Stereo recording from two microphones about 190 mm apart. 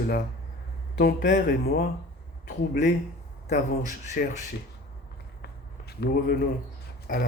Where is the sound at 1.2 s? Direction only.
60° left (ahead or behind).